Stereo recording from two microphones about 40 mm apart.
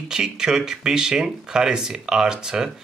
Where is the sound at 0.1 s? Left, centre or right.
Centre.